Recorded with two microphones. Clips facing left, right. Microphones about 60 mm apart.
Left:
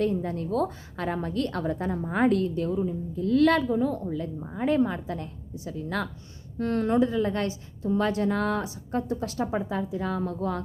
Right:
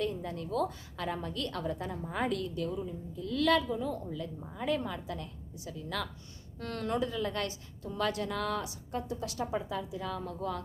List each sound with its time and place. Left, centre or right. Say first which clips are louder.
0.0 s a woman's voice: left 8 dB; left
6.6 s a woman's voice: left 10 dB; left